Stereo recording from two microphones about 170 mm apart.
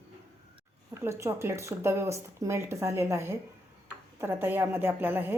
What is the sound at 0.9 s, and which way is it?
Speech, 15° right (ahead or behind).